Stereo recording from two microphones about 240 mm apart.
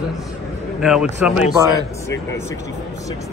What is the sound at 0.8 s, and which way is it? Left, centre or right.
Speech, centre.